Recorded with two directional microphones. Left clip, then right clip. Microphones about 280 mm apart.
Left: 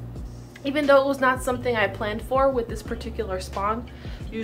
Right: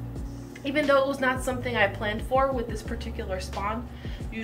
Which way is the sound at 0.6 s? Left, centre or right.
Centre.